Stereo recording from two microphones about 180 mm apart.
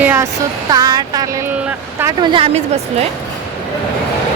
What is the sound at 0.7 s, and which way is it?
A woman's voice, 20° right (ahead or behind).